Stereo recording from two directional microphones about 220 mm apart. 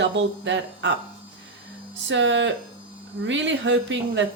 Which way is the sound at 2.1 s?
55° right (ahead or behind).